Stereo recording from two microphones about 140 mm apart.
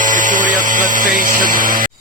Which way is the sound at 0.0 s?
70° right (ahead or behind).